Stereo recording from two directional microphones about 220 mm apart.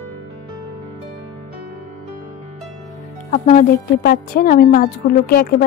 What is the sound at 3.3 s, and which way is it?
A woman's voice, 35° left (ahead or behind).